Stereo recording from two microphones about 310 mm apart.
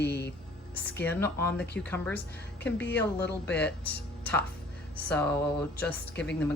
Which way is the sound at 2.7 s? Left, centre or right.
Left.